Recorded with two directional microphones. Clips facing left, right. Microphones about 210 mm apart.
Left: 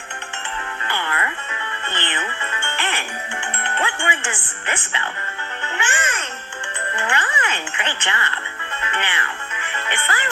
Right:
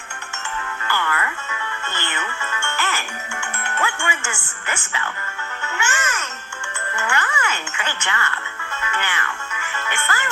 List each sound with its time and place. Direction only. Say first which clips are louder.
0.9 s music: right 2 dB; 25° left (ahead or behind)
4.7 s speech: even; 25° left (ahead or behind)
6.9 s speech: even; 20° left (ahead or behind)
7.2 s speech: right 1 dB; 30° left (ahead or behind)
7.4 s speech: left 1 dB; 20° left (ahead or behind)
9.6 s music: left 1 dB; 25° left (ahead or behind)